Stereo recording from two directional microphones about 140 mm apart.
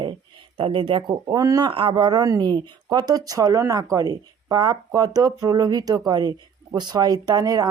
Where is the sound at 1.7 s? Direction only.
40° right (ahead or behind).